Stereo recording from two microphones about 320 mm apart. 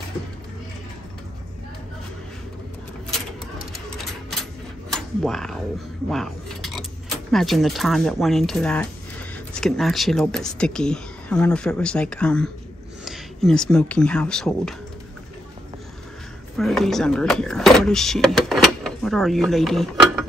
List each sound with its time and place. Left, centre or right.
4.9 s mechanisms: centre
6.0 s speech: centre
16.5 s speech: centre